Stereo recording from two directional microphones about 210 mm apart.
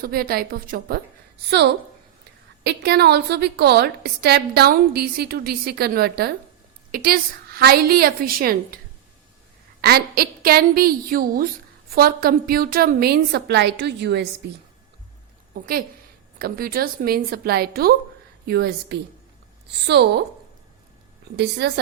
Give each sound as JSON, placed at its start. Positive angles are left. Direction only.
{"t": 0.0, "sound": "a woman's voice", "side_deg": -45}
{"t": 9.8, "sound": "a woman's voice", "side_deg": -45}
{"t": 15.5, "sound": "a woman's voice", "side_deg": -45}
{"t": 21.6, "sound": "a woman's voice", "side_deg": -50}